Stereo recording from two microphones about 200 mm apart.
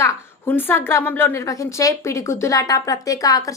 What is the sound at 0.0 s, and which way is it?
A woman's voice, 10° left (ahead or behind).